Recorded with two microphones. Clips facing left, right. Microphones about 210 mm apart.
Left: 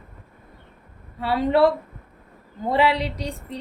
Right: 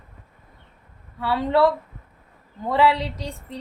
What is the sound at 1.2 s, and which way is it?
A woman's voice, 20° left (ahead or behind).